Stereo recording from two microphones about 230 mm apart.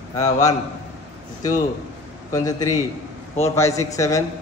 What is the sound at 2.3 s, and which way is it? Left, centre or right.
A man's voice, centre.